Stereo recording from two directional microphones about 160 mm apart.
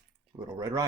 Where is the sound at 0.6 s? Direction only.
20° right (ahead or behind).